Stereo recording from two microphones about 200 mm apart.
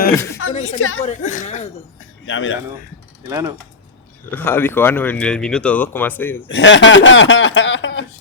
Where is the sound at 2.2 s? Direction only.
75° left (ahead or behind).